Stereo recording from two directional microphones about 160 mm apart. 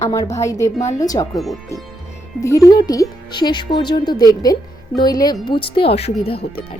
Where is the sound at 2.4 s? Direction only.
20° left (ahead or behind); by 6.1 s 35° left (ahead or behind).